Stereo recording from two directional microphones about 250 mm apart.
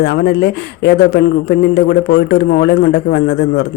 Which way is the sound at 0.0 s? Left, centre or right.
Left.